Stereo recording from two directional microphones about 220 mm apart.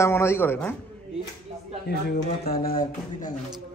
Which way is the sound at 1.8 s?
45° left (ahead or behind).